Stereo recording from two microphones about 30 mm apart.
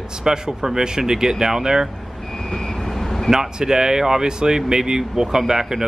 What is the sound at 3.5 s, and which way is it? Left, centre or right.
Speech, right.